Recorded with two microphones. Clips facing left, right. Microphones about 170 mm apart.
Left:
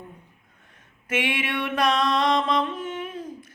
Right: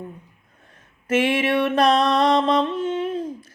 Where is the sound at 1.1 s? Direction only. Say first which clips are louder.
Right 8 dB; 40° right (ahead or behind).